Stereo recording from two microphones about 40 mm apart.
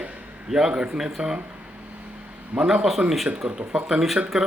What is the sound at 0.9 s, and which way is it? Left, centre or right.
Speech, centre.